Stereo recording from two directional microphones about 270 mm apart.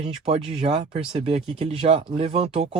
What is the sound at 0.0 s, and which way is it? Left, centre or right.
Speech, right.